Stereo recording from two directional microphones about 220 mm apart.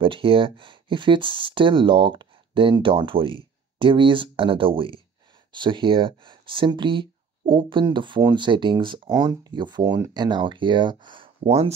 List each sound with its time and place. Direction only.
0.0 s speech: 25° right (ahead or behind)